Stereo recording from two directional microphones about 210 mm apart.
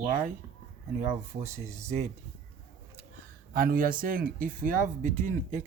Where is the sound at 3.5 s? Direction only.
45° right (ahead or behind).